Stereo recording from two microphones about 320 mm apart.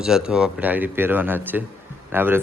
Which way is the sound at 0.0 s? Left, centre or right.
Centre.